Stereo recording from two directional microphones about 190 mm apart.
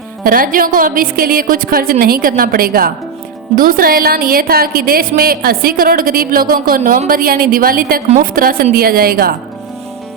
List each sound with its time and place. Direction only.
0.3 s speech: 50° right (ahead or behind)